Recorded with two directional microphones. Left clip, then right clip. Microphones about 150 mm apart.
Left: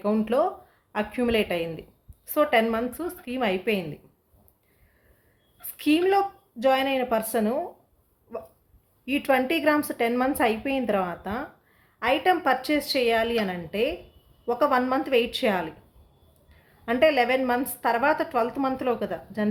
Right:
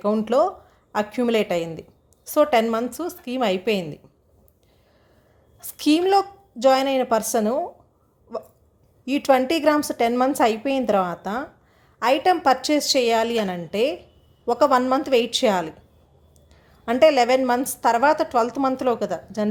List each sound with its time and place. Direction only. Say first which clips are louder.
0.0 s a woman's voice: right 4 dB; 25° right (ahead or behind)
5.7 s a woman's voice: right 4 dB; 30° right (ahead or behind)
9.0 s a woman's voice: right 5 dB; 30° right (ahead or behind)
16.8 s a woman's voice: right 5 dB; 35° right (ahead or behind)